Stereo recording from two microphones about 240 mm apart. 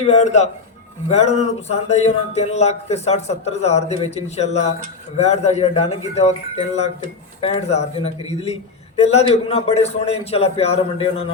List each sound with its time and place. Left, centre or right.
0.0 s speech: left
7.4 s speech: left